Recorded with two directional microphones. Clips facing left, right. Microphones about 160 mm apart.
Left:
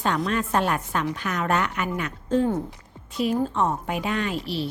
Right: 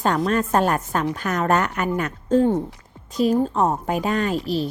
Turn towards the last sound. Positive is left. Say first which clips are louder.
# right 5 dB
turn(degrees=-40)  # may be behind; listen again after turning